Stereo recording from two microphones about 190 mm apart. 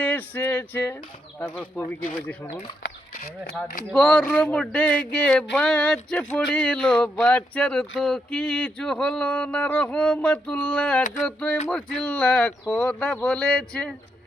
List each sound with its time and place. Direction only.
0.0 s speech: 10° left (ahead or behind)
2.8 s a sound: 55° left (ahead or behind)
3.9 s speech: 5° left (ahead or behind)